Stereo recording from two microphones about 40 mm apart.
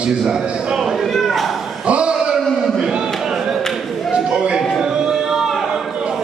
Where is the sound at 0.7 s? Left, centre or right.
Centre.